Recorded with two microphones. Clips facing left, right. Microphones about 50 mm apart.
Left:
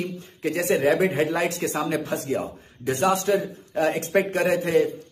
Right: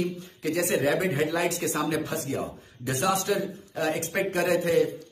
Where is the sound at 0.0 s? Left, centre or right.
Left.